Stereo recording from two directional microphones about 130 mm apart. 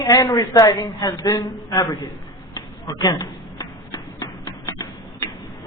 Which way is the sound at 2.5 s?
30° left (ahead or behind).